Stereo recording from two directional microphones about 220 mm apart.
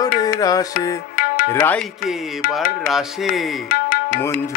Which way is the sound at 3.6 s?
40° left (ahead or behind).